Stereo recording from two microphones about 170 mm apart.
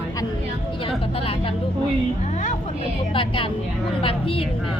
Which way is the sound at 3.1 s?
30° left (ahead or behind).